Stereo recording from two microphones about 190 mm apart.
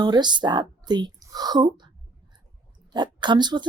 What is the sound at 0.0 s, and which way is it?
Speech, 20° right (ahead or behind).